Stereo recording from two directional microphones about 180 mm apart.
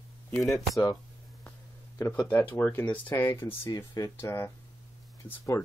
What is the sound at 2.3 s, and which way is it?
Speech, 10° left (ahead or behind).